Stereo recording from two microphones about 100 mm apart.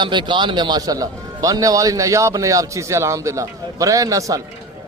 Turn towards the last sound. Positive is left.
turn(degrees=-35)  # may be behind; listen again after turning